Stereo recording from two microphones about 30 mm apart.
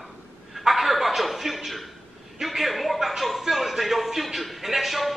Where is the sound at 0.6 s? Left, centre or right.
Centre.